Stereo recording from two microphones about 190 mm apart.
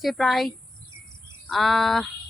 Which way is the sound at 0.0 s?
Centre (ahead or behind).